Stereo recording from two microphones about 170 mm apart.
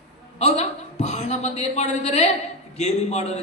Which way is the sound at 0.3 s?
40° left (ahead or behind).